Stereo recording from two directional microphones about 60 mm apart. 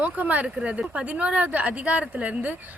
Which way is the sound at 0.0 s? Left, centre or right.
Right.